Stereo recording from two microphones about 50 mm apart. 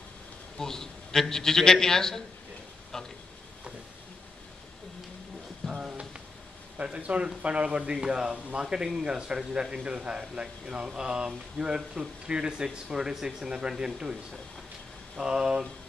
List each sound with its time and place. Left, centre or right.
0.6 s a man's voice: centre
5.7 s a sound: centre
6.8 s a man's voice: right
15.1 s a man's voice: centre